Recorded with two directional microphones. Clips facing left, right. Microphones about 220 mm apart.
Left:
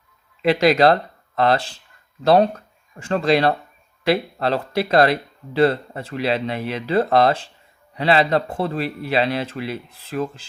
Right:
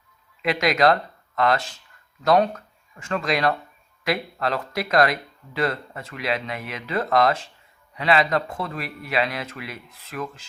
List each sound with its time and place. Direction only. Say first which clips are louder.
0.4 s speech: left 5 dB; 30° left (ahead or behind)